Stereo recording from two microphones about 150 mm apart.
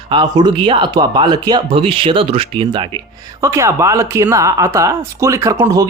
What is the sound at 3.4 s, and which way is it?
Speech, 20° right (ahead or behind).